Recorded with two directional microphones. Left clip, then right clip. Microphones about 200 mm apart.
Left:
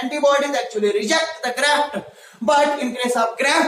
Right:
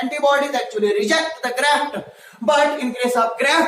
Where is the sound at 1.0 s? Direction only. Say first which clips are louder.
Right 1 dB; centre (ahead or behind).